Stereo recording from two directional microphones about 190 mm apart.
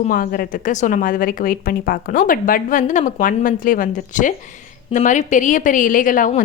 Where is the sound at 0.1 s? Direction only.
50° left (ahead or behind).